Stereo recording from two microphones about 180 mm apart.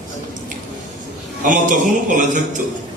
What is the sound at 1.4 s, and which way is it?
A man's voice, 45° right (ahead or behind).